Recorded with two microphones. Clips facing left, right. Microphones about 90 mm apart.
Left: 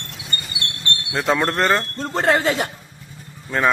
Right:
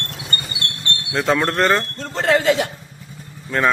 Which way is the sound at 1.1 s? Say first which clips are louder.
Right 2 dB; 10° left (ahead or behind).